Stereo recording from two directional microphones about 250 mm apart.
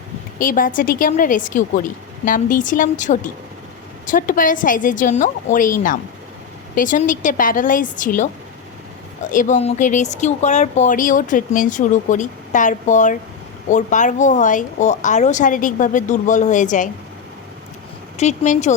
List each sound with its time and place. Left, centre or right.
0.3 s speech: left
9.3 s speech: left
18.2 s speech: left